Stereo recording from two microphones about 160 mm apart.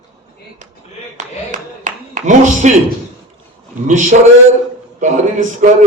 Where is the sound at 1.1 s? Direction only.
50° right (ahead or behind).